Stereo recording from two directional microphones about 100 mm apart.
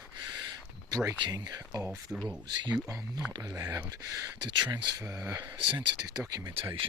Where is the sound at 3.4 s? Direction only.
30° right (ahead or behind).